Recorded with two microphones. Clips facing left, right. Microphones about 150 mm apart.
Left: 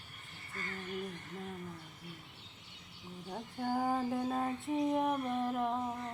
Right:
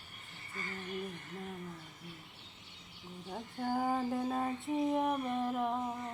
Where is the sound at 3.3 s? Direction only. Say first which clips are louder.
Even; centre (ahead or behind).